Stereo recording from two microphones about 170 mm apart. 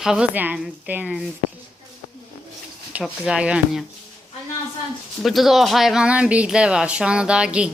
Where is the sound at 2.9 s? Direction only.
5° right (ahead or behind).